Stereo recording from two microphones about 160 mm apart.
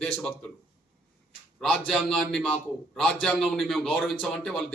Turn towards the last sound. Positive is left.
turn(degrees=0)  # may be behind; listen again after turning